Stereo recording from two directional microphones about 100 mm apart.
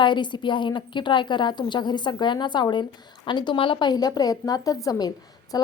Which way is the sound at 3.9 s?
40° left (ahead or behind).